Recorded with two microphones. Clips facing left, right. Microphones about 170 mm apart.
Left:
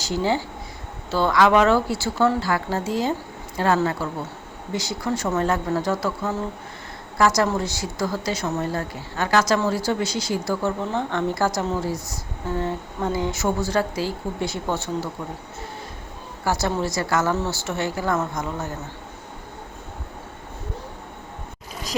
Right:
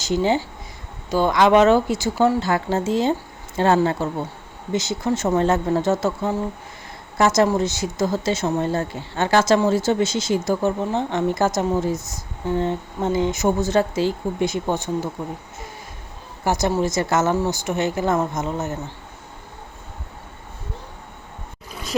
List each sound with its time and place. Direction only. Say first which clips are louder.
0.0 s a woman's voice: right 3 dB; 20° right (ahead or behind)
16.4 s a woman's voice: right 3 dB; 20° right (ahead or behind)